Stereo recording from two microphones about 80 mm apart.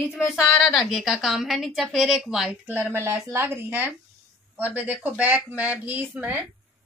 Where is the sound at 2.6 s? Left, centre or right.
Right.